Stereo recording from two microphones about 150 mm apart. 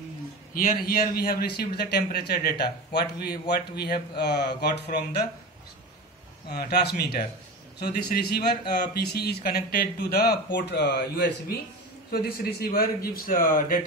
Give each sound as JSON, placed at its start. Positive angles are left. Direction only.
{"t": 0.6, "sound": "a man's voice", "side_deg": 75}
{"t": 6.5, "sound": "a man's voice", "side_deg": 90}